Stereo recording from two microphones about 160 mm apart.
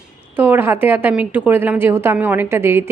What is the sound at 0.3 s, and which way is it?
A woman's voice, 15° right (ahead or behind).